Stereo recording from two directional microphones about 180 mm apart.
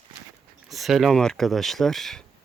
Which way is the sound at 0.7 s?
Centre (ahead or behind).